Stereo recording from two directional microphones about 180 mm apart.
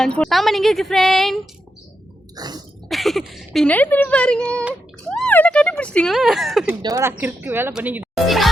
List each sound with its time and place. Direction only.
0.0 s speech: 5° left (ahead or behind)
2.3 s a sound: 20° right (ahead or behind)
2.9 s speech: centre (ahead or behind)
6.8 s speech: 15° right (ahead or behind)